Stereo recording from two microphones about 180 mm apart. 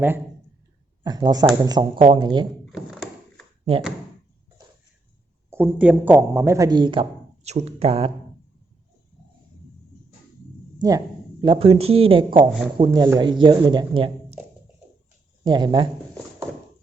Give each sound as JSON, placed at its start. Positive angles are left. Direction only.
{"t": 1.0, "sound": "speech", "side_deg": -20}
{"t": 2.7, "sound": "thunk", "side_deg": 0}
{"t": 5.5, "sound": "speech", "side_deg": -10}
{"t": 10.8, "sound": "speech", "side_deg": -20}
{"t": 15.4, "sound": "speech", "side_deg": -25}